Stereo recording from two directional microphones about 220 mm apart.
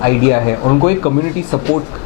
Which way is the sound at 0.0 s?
15° left (ahead or behind).